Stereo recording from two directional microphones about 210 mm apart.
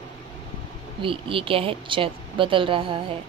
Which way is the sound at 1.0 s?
25° right (ahead or behind).